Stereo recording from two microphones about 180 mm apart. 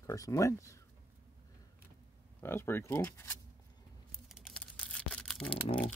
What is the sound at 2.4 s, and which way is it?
Speech, 15° left (ahead or behind).